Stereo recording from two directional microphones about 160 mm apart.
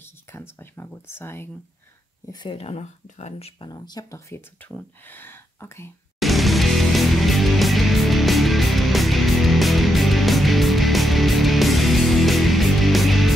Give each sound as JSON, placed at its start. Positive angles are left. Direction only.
{"t": 0.0, "sound": "a sound", "side_deg": 15}
{"t": 2.3, "sound": "speech", "side_deg": 30}
{"t": 4.3, "sound": "speech", "side_deg": 10}
{"t": 6.1, "sound": "music", "side_deg": 0}